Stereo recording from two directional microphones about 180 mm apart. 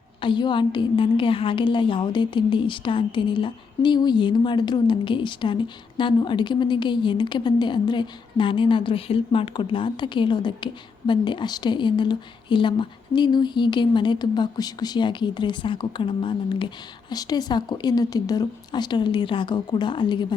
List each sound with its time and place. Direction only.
0.2 s a woman's voice: 25° left (ahead or behind)